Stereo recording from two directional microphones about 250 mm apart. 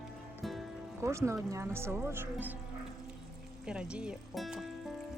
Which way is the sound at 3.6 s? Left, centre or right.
Centre.